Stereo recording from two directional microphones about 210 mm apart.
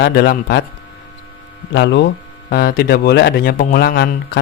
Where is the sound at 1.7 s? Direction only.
55° left (ahead or behind).